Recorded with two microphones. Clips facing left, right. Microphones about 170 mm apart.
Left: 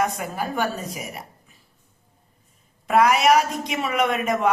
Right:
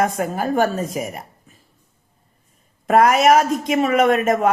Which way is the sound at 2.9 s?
50° right (ahead or behind).